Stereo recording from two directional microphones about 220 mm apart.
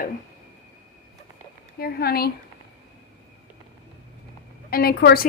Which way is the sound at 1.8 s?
45° left (ahead or behind).